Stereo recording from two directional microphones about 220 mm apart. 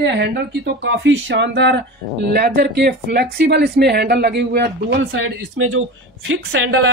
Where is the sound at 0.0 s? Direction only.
50° right (ahead or behind).